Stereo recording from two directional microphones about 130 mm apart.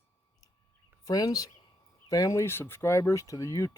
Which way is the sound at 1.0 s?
30° left (ahead or behind).